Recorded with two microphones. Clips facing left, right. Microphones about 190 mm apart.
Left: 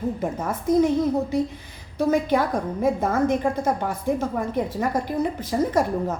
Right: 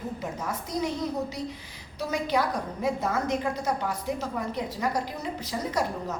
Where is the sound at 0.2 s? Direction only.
50° left (ahead or behind).